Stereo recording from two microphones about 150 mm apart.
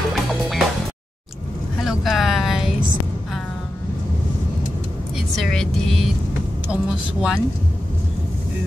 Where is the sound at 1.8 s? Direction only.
Centre (ahead or behind).